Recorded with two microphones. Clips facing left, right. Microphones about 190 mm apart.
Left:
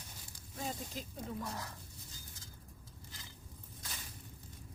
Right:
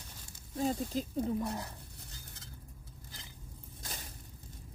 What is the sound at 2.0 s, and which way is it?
Stir, 65° right (ahead or behind).